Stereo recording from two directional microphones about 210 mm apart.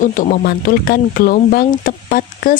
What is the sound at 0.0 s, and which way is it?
Speech, 40° left (ahead or behind).